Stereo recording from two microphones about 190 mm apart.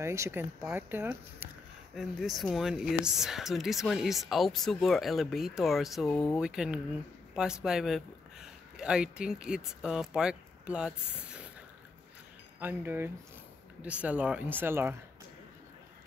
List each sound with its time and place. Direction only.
0.0 s speech: 15° right (ahead or behind)
2.0 s speech: centre (ahead or behind)
6.0 s speech: 20° left (ahead or behind)
6.3 s speech: 5° right (ahead or behind)
12.5 s speech: 10° right (ahead or behind)